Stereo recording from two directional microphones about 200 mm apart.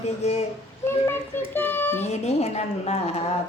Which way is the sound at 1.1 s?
10° left (ahead or behind).